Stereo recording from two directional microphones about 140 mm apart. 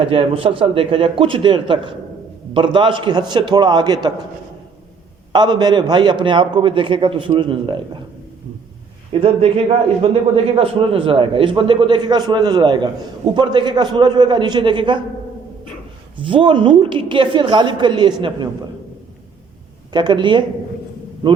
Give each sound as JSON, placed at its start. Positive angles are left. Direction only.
{"t": 0.0, "sound": "a man's voice", "side_deg": -40}
{"t": 5.3, "sound": "a man's voice", "side_deg": -30}
{"t": 9.1, "sound": "a man's voice", "side_deg": -40}
{"t": 16.2, "sound": "a man's voice", "side_deg": -35}
{"t": 19.9, "sound": "a man's voice", "side_deg": -30}